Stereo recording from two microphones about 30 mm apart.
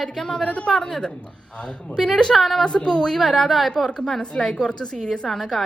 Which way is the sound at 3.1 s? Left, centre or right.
Centre.